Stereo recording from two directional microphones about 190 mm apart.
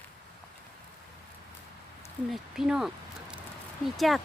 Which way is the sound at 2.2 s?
Centre (ahead or behind).